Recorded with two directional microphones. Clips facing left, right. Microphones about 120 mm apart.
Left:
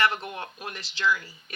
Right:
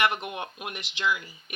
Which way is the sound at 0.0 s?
20° right (ahead or behind).